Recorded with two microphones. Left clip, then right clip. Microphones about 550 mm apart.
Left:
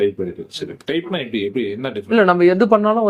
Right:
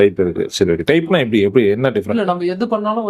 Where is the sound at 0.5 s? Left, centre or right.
Right.